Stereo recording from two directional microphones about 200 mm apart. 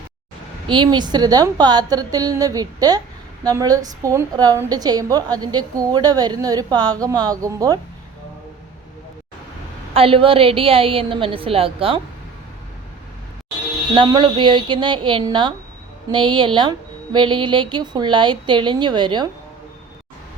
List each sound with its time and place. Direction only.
0.7 s a woman's voice: 25° right (ahead or behind)
9.9 s a woman's voice: 30° right (ahead or behind)
13.9 s a woman's voice: 25° right (ahead or behind)